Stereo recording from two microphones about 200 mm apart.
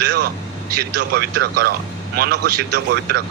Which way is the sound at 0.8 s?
50° right (ahead or behind).